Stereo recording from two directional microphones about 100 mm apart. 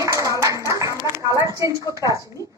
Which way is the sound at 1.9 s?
35° right (ahead or behind).